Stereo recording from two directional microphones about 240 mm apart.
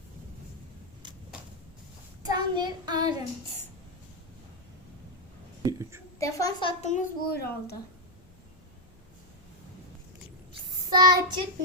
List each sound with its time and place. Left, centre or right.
2.2 s child singing: centre
5.6 s whispering: centre
6.1 s a woman's voice: centre; by 7.8 s left
10.8 s child singing: centre